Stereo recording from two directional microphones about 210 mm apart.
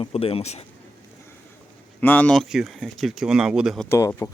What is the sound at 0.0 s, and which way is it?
Speech, 25° left (ahead or behind).